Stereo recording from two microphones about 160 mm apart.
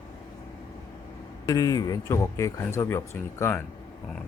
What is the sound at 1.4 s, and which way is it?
Speech, 20° left (ahead or behind).